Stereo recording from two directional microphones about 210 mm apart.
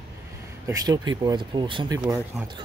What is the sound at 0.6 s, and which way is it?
Speech, 20° right (ahead or behind).